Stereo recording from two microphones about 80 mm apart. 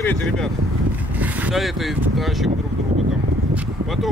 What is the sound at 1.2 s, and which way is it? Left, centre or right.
Vehicle, centre.